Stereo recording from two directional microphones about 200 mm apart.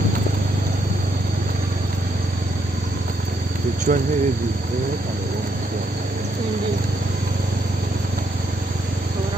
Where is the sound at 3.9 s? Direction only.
45° right (ahead or behind).